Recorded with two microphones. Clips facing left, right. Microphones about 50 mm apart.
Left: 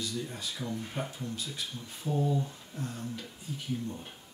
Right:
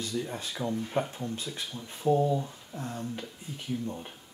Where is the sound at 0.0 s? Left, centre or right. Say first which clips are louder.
Right 3 dB; right.